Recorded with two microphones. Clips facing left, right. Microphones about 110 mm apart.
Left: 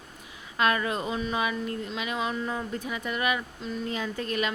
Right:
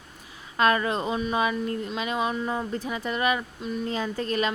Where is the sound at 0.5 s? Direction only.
40° right (ahead or behind).